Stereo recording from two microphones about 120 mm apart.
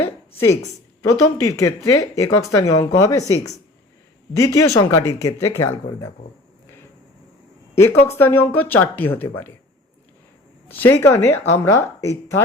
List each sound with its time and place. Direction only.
0.0 s a sound: 20° left (ahead or behind)
1.0 s speech: 25° left (ahead or behind)
8.0 s a woman's voice: 20° left (ahead or behind)
10.7 s speech: 15° left (ahead or behind)